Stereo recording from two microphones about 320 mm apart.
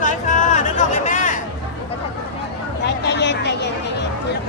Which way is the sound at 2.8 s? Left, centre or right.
Left.